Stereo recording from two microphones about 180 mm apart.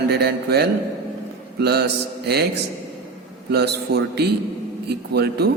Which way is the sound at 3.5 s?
65° right (ahead or behind).